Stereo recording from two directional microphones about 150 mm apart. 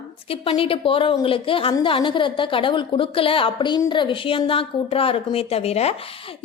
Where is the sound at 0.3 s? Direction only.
40° left (ahead or behind).